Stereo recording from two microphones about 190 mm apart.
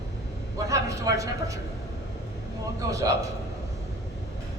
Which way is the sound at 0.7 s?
15° right (ahead or behind).